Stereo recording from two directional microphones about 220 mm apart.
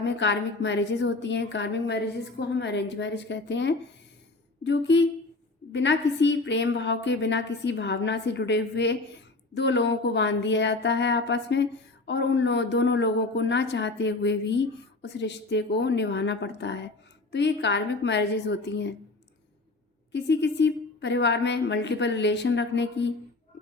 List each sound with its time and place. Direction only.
0.0 s speech: 55° left (ahead or behind)
20.1 s speech: 50° left (ahead or behind)